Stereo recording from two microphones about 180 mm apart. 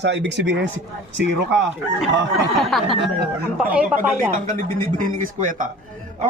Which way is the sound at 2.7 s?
Centre (ahead or behind).